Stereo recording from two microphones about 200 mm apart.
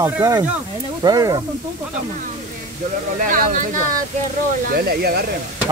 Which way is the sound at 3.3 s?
40° right (ahead or behind).